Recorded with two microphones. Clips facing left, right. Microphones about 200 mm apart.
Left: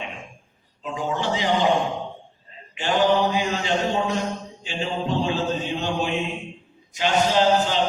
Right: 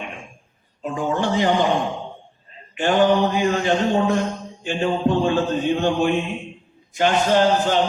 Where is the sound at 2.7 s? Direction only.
55° right (ahead or behind).